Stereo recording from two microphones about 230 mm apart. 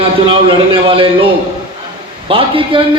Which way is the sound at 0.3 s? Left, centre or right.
Right.